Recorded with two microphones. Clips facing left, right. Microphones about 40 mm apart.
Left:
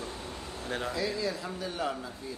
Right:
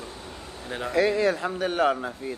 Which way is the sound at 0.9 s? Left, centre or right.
Right.